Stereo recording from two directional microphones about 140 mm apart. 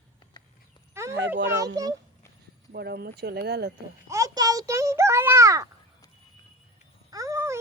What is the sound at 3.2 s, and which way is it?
Speech, 90° right.